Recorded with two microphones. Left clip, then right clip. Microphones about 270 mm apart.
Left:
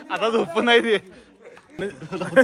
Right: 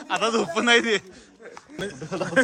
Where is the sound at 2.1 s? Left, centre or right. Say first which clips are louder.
Right 3 dB; right.